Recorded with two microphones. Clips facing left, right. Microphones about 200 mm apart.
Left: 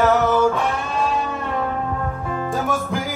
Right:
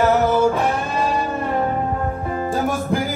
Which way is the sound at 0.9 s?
5° right (ahead or behind).